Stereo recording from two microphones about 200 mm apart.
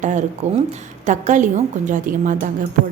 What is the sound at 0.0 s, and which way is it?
A woman's voice, 35° right (ahead or behind).